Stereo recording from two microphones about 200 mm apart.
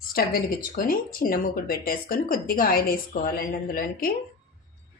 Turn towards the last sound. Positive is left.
turn(degrees=45)  # may be behind; listen again after turning